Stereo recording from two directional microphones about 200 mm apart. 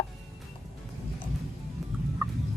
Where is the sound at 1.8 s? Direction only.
Centre (ahead or behind).